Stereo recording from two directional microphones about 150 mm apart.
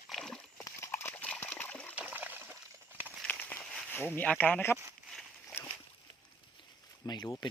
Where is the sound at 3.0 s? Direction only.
10° left (ahead or behind).